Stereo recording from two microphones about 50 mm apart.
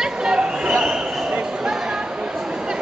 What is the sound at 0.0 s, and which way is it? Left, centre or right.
Chatter, centre.